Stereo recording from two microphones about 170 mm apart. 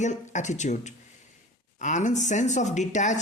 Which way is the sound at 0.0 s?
45° left (ahead or behind).